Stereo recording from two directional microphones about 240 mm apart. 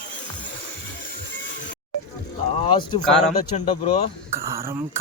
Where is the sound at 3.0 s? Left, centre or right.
Centre.